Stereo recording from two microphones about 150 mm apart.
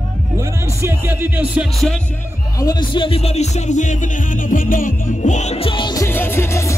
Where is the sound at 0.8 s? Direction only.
10° right (ahead or behind).